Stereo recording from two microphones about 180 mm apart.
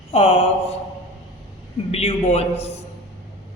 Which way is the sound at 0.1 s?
35° left (ahead or behind).